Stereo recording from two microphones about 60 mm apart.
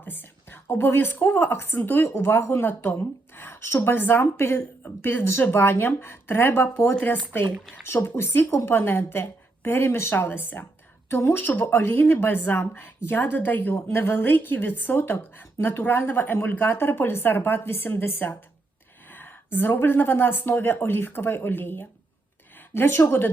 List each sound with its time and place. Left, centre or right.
0.0 s a woman's voice: left
8.1 s a woman's voice: left
10.2 s a woman's voice: left